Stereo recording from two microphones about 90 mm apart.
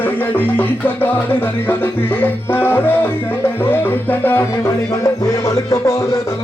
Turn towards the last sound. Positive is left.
turn(degrees=40)  # may be behind; listen again after turning